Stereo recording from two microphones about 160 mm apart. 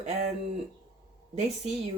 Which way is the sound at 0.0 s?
45° right (ahead or behind).